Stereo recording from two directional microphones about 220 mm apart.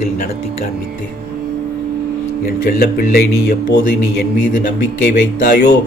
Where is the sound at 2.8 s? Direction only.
45° left (ahead or behind).